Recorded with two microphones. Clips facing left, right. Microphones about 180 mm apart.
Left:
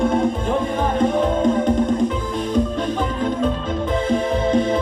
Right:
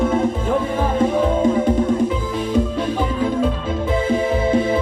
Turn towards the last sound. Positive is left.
turn(degrees=-5)  # may be behind; listen again after turning